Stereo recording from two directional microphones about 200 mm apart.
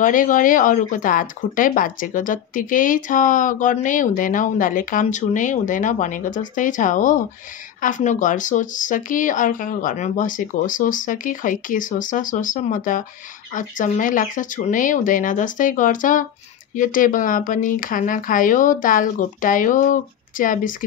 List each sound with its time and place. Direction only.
0.0 s speech: 40° left (ahead or behind)